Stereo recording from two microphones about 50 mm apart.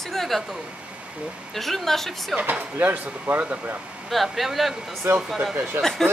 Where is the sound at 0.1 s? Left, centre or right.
Centre.